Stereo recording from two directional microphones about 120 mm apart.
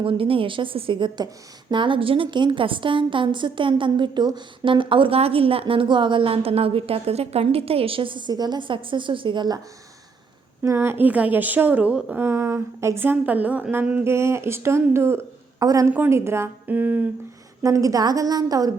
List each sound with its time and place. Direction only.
0.0 s a woman's voice: 45° right (ahead or behind)
10.6 s a woman's voice: 20° right (ahead or behind)
12.2 s a woman's voice: 20° right (ahead or behind)
17.6 s a woman's voice: 25° right (ahead or behind)